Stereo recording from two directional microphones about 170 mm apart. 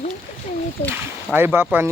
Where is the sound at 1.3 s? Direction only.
10° right (ahead or behind).